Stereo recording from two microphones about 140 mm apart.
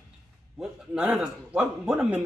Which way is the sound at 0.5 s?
5° right (ahead or behind).